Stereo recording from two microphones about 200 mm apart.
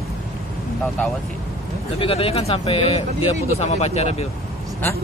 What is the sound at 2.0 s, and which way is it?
Speech, 30° left (ahead or behind).